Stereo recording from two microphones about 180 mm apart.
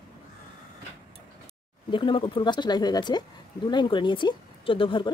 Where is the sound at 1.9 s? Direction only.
25° left (ahead or behind).